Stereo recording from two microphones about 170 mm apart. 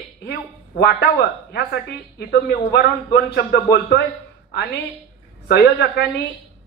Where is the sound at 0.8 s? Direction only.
70° left (ahead or behind).